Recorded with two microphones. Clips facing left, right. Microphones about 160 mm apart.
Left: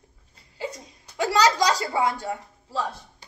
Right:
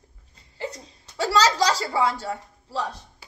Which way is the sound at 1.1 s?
15° left (ahead or behind).